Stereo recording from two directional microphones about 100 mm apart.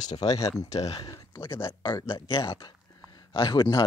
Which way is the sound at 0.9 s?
50° left (ahead or behind).